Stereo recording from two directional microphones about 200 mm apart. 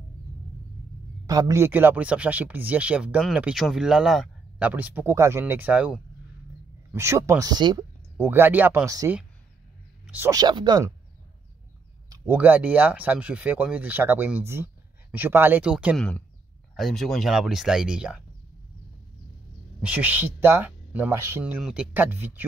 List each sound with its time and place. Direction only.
1.2 s speech: 15° right (ahead or behind)
8.3 s speech: 10° right (ahead or behind)
12.1 s speech: 10° right (ahead or behind)
19.8 s speech: 5° right (ahead or behind)